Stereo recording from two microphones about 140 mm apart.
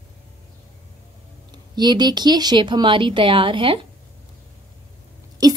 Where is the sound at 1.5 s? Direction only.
30° right (ahead or behind).